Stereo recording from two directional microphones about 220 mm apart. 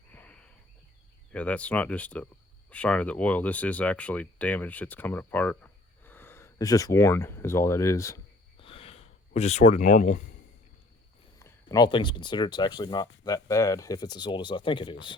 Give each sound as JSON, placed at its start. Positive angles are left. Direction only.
{"t": 0.1, "sound": "a sound", "side_deg": 5}
{"t": 1.3, "sound": "speech", "side_deg": 5}
{"t": 11.3, "sound": "speech", "side_deg": 15}